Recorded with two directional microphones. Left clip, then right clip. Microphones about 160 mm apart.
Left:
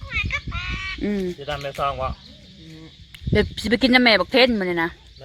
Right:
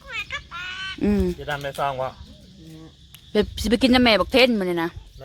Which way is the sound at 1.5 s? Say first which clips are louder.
Left 4 dB; 60° right (ahead or behind).